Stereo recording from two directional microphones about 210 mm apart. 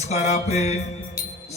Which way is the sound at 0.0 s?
30° left (ahead or behind).